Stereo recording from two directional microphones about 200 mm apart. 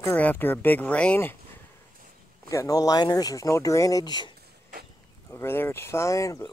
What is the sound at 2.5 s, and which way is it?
Speech, 15° left (ahead or behind).